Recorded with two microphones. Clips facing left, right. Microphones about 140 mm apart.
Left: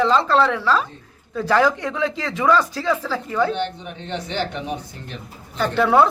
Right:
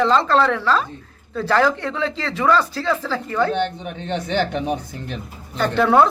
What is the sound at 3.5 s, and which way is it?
Speech, 55° right (ahead or behind).